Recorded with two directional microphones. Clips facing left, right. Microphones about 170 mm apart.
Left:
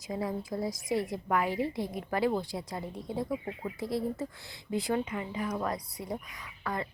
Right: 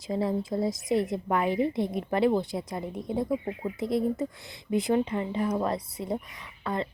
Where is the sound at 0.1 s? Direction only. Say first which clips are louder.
Right 6 dB; 30° right (ahead or behind).